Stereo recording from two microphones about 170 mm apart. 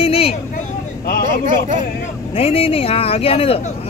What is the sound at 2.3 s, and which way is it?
Speech, 35° left (ahead or behind).